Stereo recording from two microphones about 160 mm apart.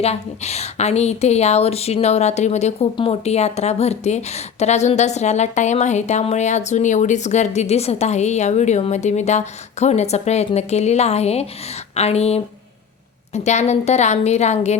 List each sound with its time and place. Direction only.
0.0 s a woman's voice: 40° left (ahead or behind)